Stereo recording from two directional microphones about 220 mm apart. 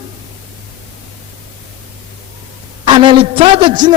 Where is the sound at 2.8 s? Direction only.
20° right (ahead or behind).